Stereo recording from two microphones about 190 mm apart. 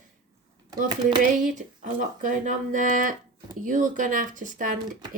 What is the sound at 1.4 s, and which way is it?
Speech, 45° right (ahead or behind).